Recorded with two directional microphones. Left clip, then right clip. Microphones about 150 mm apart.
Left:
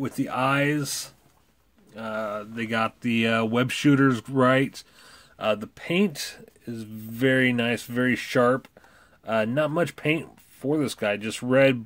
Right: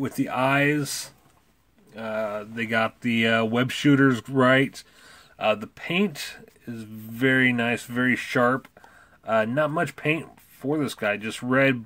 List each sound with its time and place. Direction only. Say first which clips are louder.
0.0 s speech: right 1 dB; 5° left (ahead or behind); by 11.8 s 25° left (ahead or behind)